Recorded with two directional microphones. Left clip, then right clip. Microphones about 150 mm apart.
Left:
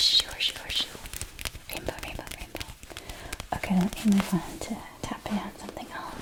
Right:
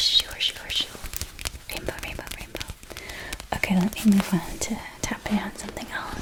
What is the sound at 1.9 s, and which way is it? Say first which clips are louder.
Whispering: right 3 dB; 10° right (ahead or behind).